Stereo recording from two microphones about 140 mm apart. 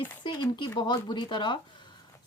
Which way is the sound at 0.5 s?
35° left (ahead or behind).